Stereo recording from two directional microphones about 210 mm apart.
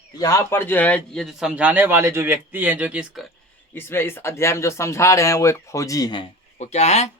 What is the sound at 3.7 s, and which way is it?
Speech, 10° left (ahead or behind).